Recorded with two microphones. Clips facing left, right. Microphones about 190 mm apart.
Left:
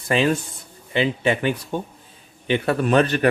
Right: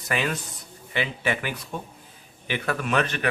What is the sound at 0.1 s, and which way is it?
Speech, 25° left (ahead or behind).